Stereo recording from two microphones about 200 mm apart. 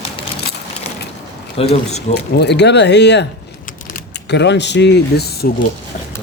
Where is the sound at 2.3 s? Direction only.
55° left (ahead or behind).